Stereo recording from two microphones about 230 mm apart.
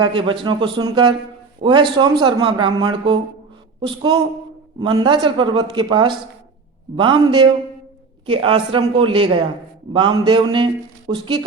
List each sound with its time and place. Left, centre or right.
0.0 s a man's voice: right